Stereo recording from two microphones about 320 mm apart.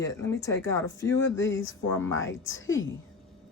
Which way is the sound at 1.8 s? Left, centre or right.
Centre.